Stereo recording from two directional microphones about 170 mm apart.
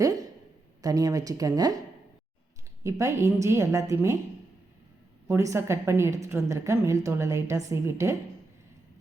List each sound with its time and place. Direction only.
0.8 s speech: 20° right (ahead or behind)
2.8 s a woman's voice: 15° right (ahead or behind)
5.3 s a woman's voice: 15° right (ahead or behind)